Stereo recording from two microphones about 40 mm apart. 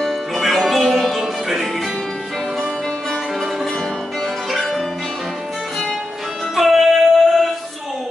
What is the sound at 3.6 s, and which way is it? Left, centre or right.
Music, centre.